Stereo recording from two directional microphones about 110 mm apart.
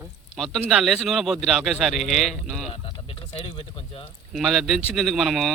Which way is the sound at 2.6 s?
65° left (ahead or behind).